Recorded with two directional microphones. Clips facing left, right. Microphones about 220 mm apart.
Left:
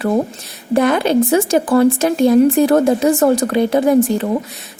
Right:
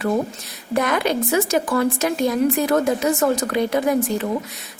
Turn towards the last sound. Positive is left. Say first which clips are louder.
# left 7 dB
turn(degrees=30)  # may be behind; listen again after turning